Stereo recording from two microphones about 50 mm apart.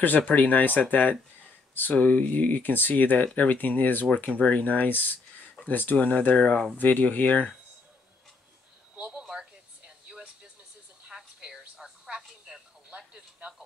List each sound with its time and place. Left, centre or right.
0.0 s speech: left
6.3 s speech: left
6.8 s speech: left
8.9 s a sound: centre
11.7 s telephone: centre
12.9 s television: centre